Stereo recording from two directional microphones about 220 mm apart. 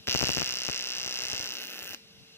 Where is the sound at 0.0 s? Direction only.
10° left (ahead or behind).